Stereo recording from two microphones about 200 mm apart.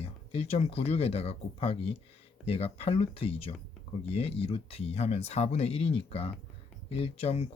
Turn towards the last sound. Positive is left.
turn(degrees=30)  # may be behind; listen again after turning